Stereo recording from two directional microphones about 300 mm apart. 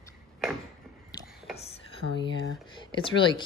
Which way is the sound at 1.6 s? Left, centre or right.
Left.